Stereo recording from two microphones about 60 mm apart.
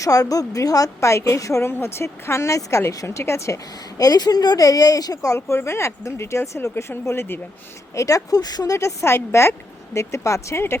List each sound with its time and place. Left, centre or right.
0.0 s a woman's voice: left
1.7 s speech: left
3.9 s speech: left
5.5 s speech: left
7.9 s speech: left